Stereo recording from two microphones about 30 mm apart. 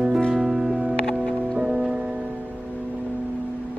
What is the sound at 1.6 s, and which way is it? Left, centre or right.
Music, right.